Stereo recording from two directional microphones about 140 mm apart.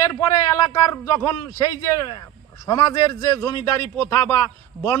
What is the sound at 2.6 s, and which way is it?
A man's voice, 20° left (ahead or behind).